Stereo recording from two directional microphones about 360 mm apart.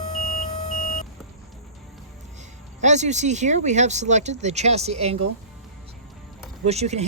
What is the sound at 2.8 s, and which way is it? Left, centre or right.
Speech, centre.